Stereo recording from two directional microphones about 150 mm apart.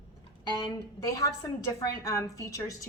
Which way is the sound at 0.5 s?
25° left (ahead or behind).